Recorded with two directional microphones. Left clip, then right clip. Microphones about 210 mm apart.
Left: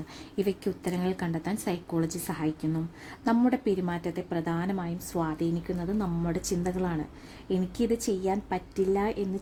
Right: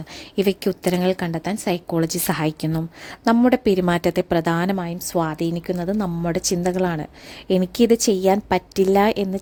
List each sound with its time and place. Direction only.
0.3 s a woman's voice: 40° right (ahead or behind)